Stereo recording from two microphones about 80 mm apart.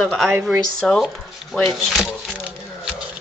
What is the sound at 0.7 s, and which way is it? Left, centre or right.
A woman's voice, centre.